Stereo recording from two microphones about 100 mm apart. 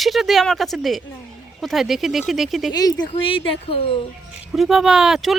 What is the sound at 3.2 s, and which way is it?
Speech, 65° left (ahead or behind).